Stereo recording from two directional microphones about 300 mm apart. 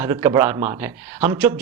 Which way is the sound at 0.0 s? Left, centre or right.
Centre.